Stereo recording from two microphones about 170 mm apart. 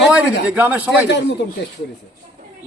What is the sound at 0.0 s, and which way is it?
Speech, 5° right (ahead or behind).